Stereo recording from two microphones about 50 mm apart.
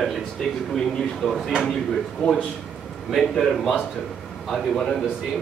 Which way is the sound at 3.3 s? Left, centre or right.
Centre.